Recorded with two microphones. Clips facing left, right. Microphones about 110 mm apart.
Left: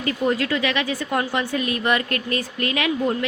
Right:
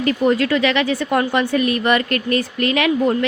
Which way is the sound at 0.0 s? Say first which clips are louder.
Right 5 dB; 75° right (ahead or behind).